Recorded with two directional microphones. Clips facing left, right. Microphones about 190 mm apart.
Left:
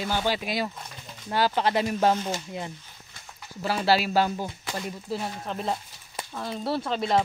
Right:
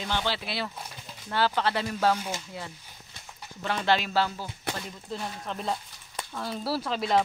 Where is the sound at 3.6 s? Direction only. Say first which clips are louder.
Left 3 dB; 5° left (ahead or behind).